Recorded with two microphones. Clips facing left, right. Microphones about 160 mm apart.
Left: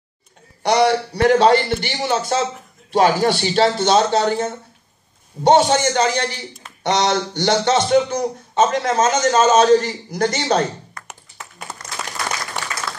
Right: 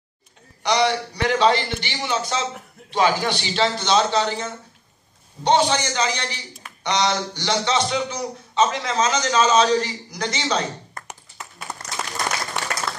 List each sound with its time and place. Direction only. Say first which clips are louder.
0.7 s a man's voice: left 5 dB; 45° left (ahead or behind)
11.0 s tap: right 1 dB; 50° right (ahead or behind)